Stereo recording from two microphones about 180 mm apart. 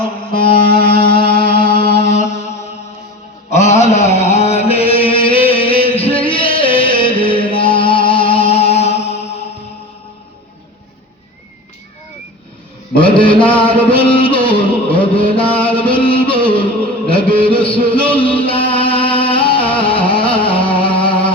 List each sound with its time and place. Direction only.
0.3 s music: 55° left (ahead or behind)
2.0 s mantra: 40° left (ahead or behind)
3.5 s chant: 40° left (ahead or behind)
13.0 s music: 30° left (ahead or behind)
17.1 s a sound: 30° left (ahead or behind)